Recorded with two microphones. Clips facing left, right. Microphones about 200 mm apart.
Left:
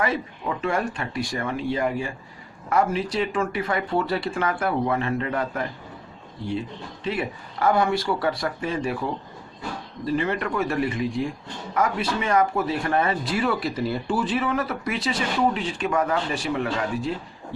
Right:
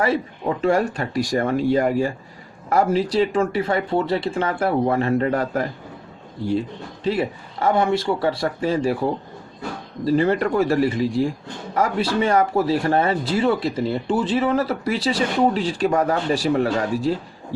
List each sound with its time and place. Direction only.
0.0 s speech: 35° right (ahead or behind)
7.0 s speech: 30° right (ahead or behind)
10.1 s speech: 35° right (ahead or behind)